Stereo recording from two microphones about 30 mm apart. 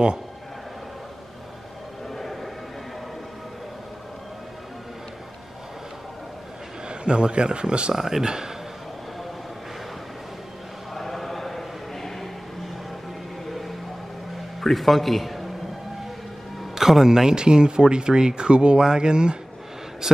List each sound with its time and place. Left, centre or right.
2.0 s a sound: centre
6.9 s speech: right
7.9 s speech: centre
11.0 s choir: centre
13.5 s music: centre
14.6 s a man's voice: centre
16.7 s speech: centre; by 18.8 s right
18.8 s speech: right